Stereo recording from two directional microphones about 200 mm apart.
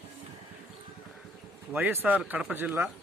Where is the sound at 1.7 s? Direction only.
10° right (ahead or behind).